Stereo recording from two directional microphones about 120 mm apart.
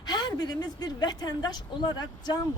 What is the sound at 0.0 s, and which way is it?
A woman's voice, 35° left (ahead or behind).